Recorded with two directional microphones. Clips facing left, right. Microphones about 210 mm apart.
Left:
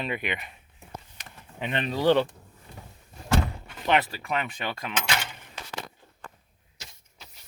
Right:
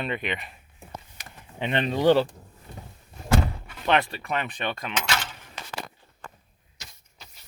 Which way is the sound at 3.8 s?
15° left (ahead or behind).